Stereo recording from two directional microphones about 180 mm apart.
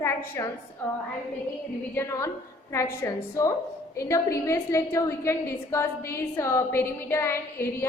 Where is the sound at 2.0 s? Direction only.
15° left (ahead or behind).